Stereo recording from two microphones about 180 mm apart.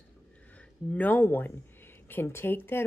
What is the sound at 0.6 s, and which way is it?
Speech, 10° left (ahead or behind).